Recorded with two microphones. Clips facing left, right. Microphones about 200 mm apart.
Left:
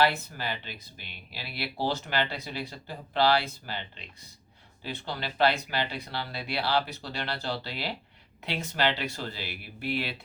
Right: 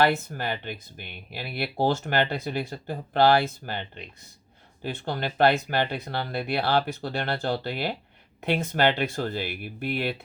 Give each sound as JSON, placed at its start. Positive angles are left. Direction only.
{"t": 0.0, "sound": "speech", "side_deg": -50}